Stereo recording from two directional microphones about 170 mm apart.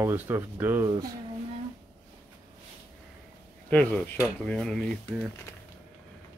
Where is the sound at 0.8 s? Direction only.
25° right (ahead or behind).